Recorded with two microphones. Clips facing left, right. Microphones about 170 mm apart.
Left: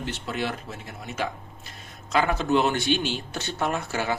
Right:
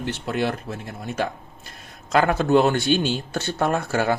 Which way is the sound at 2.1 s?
55° right (ahead or behind).